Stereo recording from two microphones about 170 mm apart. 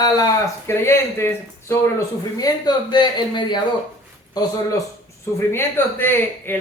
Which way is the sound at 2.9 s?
25° left (ahead or behind).